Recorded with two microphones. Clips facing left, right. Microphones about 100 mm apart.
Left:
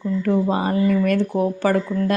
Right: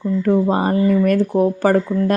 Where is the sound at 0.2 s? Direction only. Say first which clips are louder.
Right 4 dB; 35° right (ahead or behind).